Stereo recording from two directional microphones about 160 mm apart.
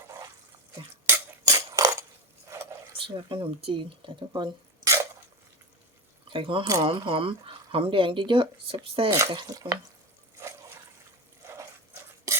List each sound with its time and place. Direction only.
1.0 s a sound: 20° right (ahead or behind)
2.9 s speech: 30° right (ahead or behind)
6.3 s speech: 35° right (ahead or behind)
9.0 s speech: 20° right (ahead or behind)